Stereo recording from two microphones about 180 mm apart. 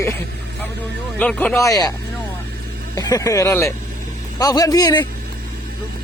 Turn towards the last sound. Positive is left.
turn(degrees=20)  # may be behind; listen again after turning